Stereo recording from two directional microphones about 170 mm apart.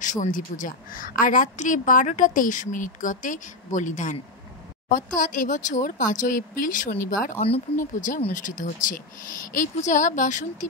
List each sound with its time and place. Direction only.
0.0 s a woman's voice: 50° left (ahead or behind)